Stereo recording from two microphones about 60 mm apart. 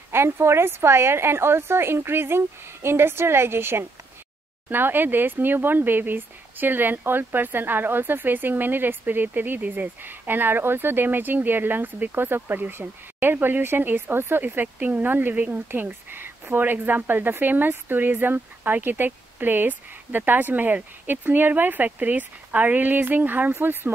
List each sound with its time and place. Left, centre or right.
0.1 s a woman's voice: right